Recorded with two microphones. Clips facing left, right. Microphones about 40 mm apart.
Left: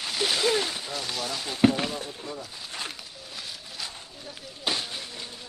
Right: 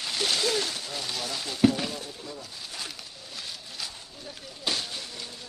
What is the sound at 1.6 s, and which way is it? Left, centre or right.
Speech, left.